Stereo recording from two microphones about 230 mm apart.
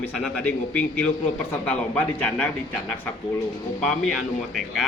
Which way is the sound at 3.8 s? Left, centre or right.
Centre.